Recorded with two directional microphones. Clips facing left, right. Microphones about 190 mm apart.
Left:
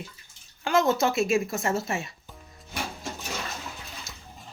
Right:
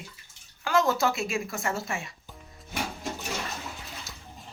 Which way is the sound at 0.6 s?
20° left (ahead or behind).